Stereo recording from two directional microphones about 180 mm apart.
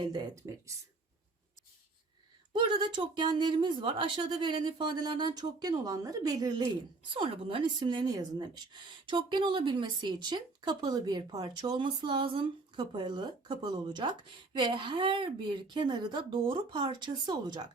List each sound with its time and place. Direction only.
0.0 s speech: 25° right (ahead or behind)
2.5 s speech: 25° right (ahead or behind)